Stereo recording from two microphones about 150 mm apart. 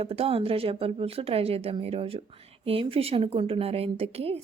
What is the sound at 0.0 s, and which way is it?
A woman's voice, 40° right (ahead or behind).